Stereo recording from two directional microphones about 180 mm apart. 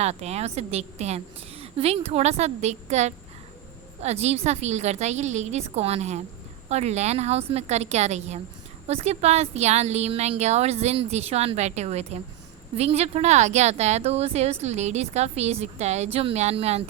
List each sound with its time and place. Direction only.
0.0 s a woman's voice: 35° right (ahead or behind)